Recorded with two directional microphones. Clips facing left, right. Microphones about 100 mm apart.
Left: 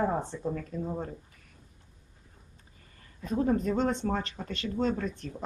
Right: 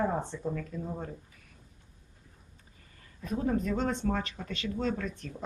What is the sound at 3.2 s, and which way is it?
A woman's voice, 30° left (ahead or behind).